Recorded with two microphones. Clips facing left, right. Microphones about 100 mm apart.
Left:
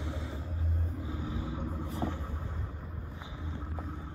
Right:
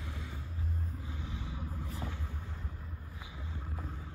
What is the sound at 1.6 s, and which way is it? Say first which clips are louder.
Vehicle: left 7 dB; 30° left (ahead or behind).